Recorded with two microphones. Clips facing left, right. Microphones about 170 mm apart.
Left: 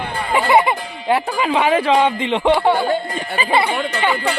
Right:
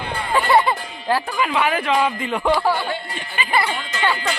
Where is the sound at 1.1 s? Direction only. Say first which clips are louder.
Left 3 dB; 25° left (ahead or behind).